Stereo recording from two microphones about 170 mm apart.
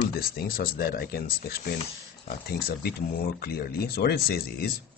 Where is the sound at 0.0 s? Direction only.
60° left (ahead or behind).